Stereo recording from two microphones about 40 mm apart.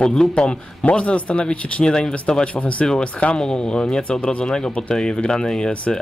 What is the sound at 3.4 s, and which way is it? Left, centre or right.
Speech, left.